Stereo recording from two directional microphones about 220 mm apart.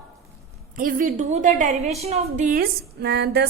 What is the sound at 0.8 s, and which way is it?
A woman's voice, 40° right (ahead or behind).